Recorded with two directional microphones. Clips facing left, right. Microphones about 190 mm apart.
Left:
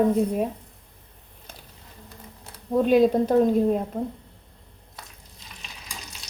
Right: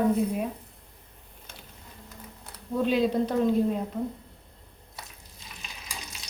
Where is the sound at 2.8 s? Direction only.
45° left (ahead or behind).